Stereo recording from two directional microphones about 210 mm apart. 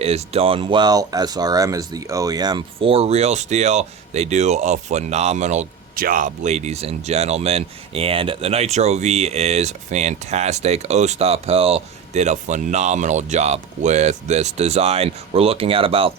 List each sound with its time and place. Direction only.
0.0 s speech: 30° right (ahead or behind)